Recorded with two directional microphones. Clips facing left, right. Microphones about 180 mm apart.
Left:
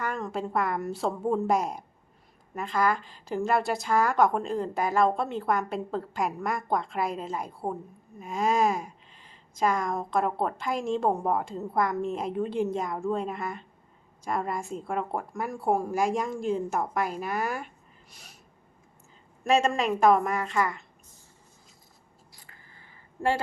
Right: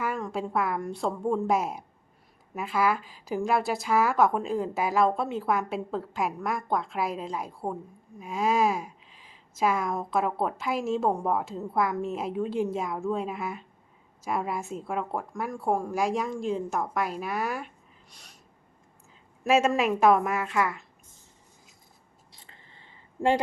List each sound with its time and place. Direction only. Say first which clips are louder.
0.0 s speech: right 1 dB; centre (ahead or behind)
18.1 s snort: left 2 dB; 5° left (ahead or behind)
19.5 s speech: right 1 dB; 5° right (ahead or behind)
22.3 s a sound: right 2 dB; 25° right (ahead or behind)